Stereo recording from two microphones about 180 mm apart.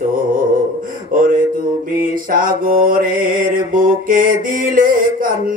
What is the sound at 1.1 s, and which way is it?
Mantra, 50° right (ahead or behind).